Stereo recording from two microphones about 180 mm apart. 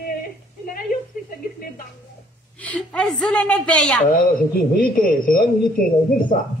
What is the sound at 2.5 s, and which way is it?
A woman's voice, 5° left (ahead or behind).